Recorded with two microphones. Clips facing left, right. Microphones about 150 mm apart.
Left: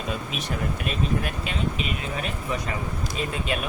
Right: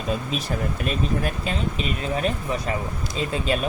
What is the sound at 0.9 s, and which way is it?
Speech, 35° right (ahead or behind).